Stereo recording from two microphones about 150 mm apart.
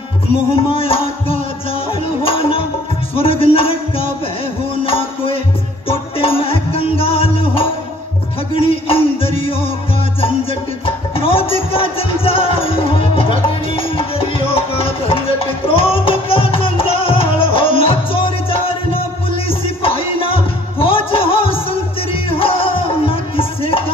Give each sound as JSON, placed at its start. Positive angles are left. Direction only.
{"t": 0.7, "sound": "music", "side_deg": 40}
{"t": 4.8, "sound": "music", "side_deg": 40}
{"t": 8.5, "sound": "a sound", "side_deg": 40}
{"t": 11.1, "sound": "music", "side_deg": 40}